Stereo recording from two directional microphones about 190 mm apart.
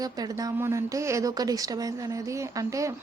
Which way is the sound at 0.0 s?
20° right (ahead or behind).